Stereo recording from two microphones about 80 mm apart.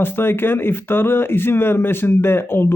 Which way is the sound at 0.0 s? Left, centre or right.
Left.